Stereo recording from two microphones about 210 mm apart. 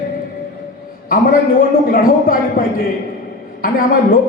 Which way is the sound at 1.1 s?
40° left (ahead or behind).